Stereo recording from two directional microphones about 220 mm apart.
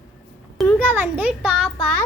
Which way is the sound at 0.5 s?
5° left (ahead or behind).